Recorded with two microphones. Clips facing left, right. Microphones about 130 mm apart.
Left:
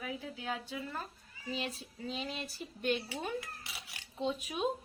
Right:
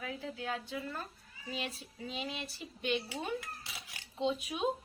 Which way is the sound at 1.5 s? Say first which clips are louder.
Even; 35° left (ahead or behind).